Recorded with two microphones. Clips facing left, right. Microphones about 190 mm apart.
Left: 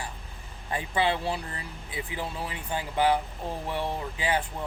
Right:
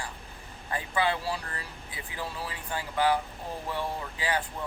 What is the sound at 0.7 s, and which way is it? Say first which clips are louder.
Speech: left 2 dB; 20° left (ahead or behind).